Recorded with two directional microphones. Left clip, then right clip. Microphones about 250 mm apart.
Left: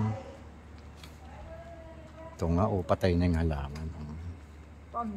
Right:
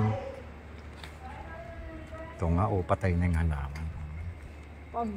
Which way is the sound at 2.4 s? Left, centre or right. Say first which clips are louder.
Even; left.